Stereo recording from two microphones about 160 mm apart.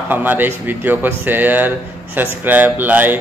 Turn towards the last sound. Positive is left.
turn(degrees=-10)  # may be behind; listen again after turning